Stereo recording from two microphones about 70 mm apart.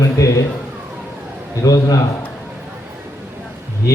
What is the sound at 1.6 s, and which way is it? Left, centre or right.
Speech, left.